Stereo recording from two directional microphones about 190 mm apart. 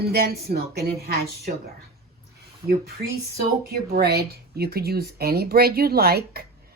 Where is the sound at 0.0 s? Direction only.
55° right (ahead or behind).